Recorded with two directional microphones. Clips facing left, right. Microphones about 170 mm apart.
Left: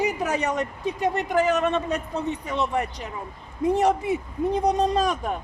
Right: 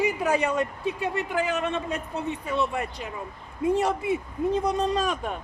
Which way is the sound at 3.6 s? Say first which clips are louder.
Left 3 dB; 40° left (ahead or behind).